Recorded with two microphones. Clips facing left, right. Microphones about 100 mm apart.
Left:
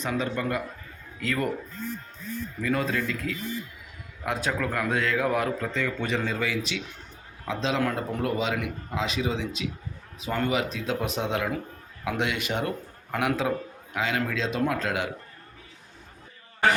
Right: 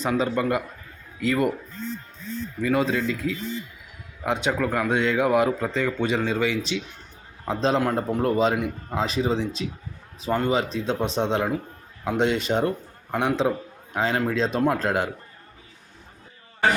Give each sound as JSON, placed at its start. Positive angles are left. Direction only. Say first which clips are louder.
{"t": 0.0, "sound": "a man's voice", "louder": "right 5 dB", "side_deg": -25}
{"t": 2.6, "sound": "a man's voice", "louder": "right 4 dB", "side_deg": -25}
{"t": 5.6, "sound": "a man's voice", "louder": "right 4 dB", "side_deg": -30}
{"t": 7.4, "sound": "a man's voice", "louder": "right 4 dB", "side_deg": -40}